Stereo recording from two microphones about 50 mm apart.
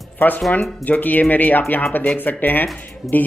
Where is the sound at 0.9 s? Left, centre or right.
Left.